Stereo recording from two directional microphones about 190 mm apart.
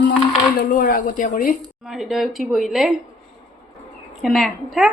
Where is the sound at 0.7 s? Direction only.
45° left (ahead or behind).